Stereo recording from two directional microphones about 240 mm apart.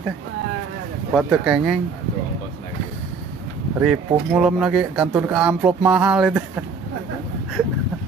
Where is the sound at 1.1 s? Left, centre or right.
Centre.